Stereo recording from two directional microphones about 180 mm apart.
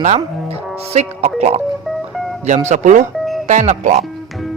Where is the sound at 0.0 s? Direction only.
40° right (ahead or behind).